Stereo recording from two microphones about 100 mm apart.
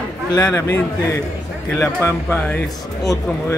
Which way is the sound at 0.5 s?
30° left (ahead or behind).